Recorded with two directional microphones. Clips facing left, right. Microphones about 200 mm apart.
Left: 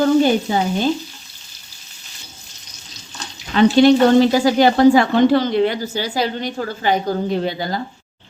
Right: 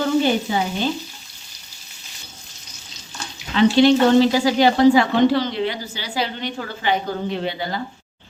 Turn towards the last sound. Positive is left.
turn(degrees=40)  # may be behind; listen again after turning